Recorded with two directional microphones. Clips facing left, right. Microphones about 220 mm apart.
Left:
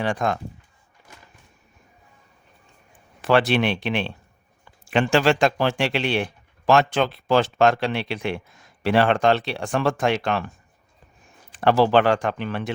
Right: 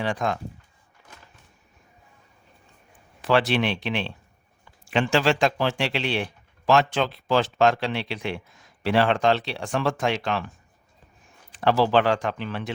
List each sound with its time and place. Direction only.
0.0 s speech: 50° left (ahead or behind)
3.2 s speech: 55° left (ahead or behind)
11.5 s speech: 55° left (ahead or behind)